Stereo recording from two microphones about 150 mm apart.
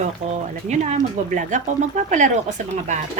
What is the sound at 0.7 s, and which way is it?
A woman's voice, 55° right (ahead or behind).